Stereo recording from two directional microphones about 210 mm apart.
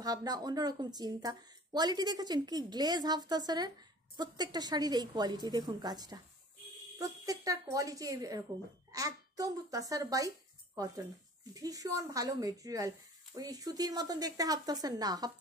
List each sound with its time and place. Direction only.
0.0 s a child's voice: 20° right (ahead or behind)